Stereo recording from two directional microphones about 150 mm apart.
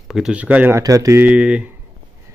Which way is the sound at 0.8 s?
20° right (ahead or behind).